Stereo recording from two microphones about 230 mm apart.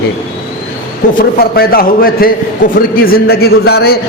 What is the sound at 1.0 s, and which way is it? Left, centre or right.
A man's voice, left.